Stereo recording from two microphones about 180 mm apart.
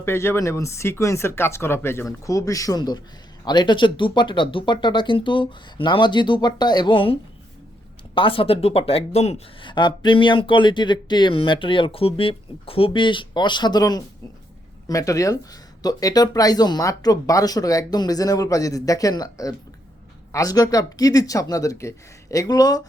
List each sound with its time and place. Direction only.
0.0 s speech: 15° left (ahead or behind)